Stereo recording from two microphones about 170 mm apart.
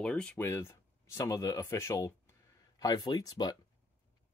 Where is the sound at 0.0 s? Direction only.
5° left (ahead or behind); by 3.5 s 20° left (ahead or behind).